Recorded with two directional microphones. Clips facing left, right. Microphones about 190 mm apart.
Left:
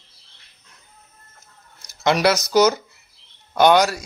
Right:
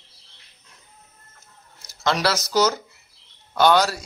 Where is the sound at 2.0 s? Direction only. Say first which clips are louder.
Left 5 dB; 15° left (ahead or behind).